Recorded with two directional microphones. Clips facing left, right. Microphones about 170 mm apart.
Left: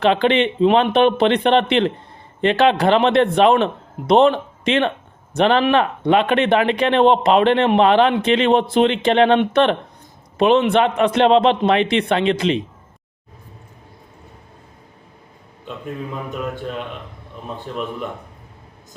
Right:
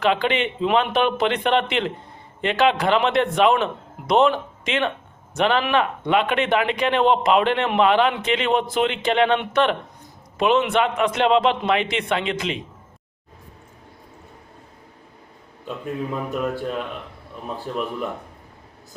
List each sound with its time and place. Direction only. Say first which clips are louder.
0.0 s a man's voice: left 5 dB; 30° left (ahead or behind)
16.3 s speech: right 1 dB; 5° right (ahead or behind)